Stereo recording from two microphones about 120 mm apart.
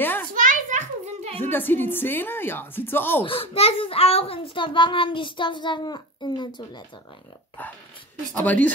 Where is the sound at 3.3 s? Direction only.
50° left (ahead or behind).